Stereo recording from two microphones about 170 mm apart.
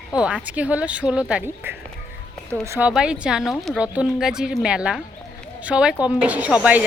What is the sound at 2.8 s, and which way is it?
A woman's voice, 5° right (ahead or behind).